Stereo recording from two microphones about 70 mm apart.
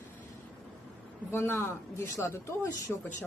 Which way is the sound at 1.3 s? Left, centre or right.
Left.